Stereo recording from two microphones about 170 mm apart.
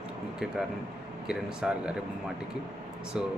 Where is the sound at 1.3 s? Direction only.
5° right (ahead or behind).